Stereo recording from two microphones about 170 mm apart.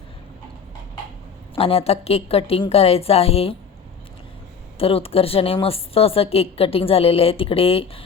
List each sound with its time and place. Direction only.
1.5 s a woman's voice: 35° left (ahead or behind)
4.8 s a woman's voice: 35° left (ahead or behind)